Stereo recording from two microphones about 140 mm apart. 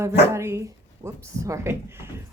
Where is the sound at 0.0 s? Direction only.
20° right (ahead or behind).